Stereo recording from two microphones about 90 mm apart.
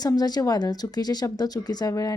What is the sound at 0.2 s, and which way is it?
Speech, 45° left (ahead or behind).